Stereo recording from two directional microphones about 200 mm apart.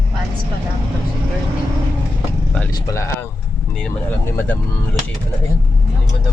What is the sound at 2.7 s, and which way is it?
Vehicle, 15° left (ahead or behind).